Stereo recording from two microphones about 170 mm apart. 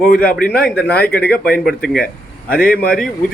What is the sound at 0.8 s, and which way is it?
Speech, 65° left (ahead or behind).